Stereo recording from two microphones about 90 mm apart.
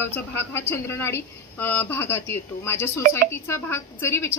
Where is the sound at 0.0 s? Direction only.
25° left (ahead or behind).